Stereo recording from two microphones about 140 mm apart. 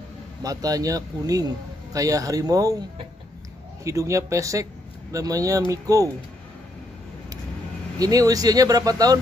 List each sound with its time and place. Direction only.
0.4 s a man's voice: 25° right (ahead or behind)
3.8 s a man's voice: 20° right (ahead or behind)
8.0 s a man's voice: 25° right (ahead or behind)